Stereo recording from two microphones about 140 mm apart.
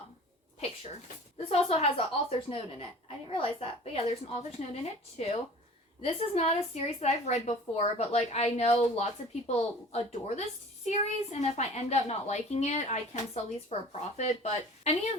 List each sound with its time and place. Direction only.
1.5 s a woman's voice: 45° left (ahead or behind)